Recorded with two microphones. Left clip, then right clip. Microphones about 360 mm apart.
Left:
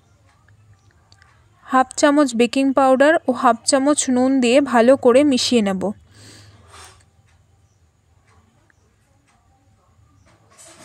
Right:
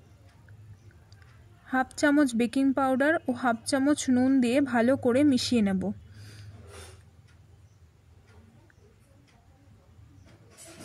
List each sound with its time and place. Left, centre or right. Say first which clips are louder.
1.7 s a woman's voice: left 10 dB; left